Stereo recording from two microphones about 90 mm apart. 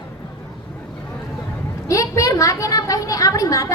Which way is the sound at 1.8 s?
40° left (ahead or behind).